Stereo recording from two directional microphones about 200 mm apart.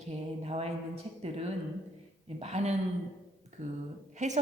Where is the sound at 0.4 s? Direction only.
30° right (ahead or behind).